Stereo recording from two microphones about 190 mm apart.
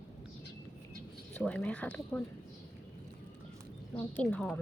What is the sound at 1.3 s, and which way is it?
Speech, 5° left (ahead or behind).